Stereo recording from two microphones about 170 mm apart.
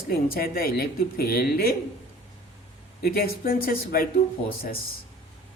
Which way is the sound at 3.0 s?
60° left (ahead or behind).